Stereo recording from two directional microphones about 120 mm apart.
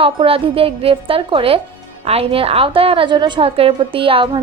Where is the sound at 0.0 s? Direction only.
50° right (ahead or behind).